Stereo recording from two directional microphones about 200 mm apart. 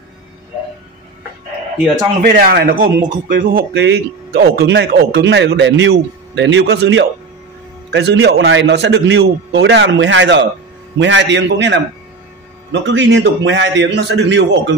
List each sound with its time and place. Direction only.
2.2 s a man's voice: 45° right (ahead or behind)
3.7 s speech: 55° right (ahead or behind)